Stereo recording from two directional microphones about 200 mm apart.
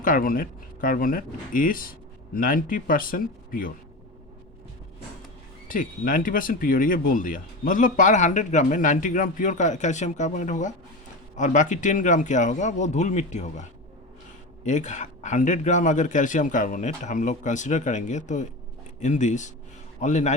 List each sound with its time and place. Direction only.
0.0 s speech: 45° left (ahead or behind)
5.6 s speech: 40° left (ahead or behind)